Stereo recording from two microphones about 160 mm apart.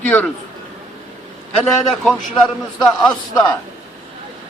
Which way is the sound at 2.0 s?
Centre (ahead or behind).